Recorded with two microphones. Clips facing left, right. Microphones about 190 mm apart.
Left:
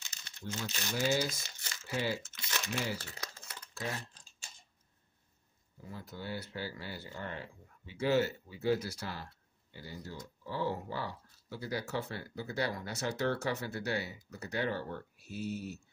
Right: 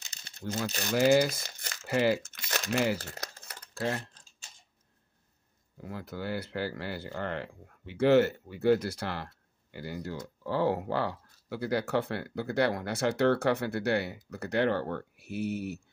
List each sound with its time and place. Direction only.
0.7 s speech: 45° right (ahead or behind)
0.9 s speech: 65° right (ahead or behind)
2.4 s crumpling: 45° right (ahead or behind)
2.7 s speech: 70° right (ahead or behind)
3.0 s speech: 40° right (ahead or behind)
3.4 s a sound: 65° right (ahead or behind)
5.8 s speech: 70° right (ahead or behind)